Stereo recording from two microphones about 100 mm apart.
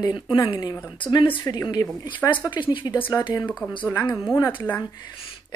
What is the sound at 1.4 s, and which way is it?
Speech, 40° left (ahead or behind).